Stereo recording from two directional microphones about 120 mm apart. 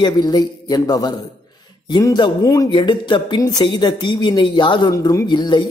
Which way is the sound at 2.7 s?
40° left (ahead or behind).